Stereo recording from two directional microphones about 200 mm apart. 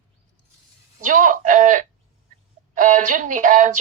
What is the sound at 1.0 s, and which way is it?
Speech, 40° right (ahead or behind).